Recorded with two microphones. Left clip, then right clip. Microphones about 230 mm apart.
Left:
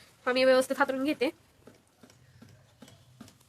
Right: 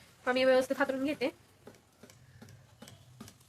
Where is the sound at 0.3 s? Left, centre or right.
Left.